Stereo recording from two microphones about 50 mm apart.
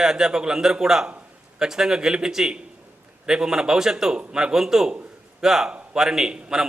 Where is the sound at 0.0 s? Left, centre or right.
Centre.